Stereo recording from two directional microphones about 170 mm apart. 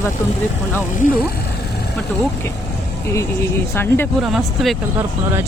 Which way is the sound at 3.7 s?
15° left (ahead or behind).